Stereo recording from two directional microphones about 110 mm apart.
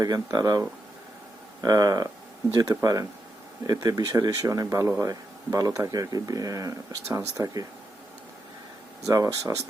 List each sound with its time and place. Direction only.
0.0 s speech: 35° right (ahead or behind)
1.6 s speech: 35° right (ahead or behind)
9.0 s speech: 30° right (ahead or behind)